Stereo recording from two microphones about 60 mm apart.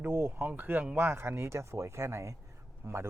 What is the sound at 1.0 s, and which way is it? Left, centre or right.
Speech, right.